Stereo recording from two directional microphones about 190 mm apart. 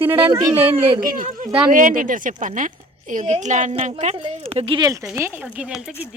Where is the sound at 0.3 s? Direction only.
25° right (ahead or behind).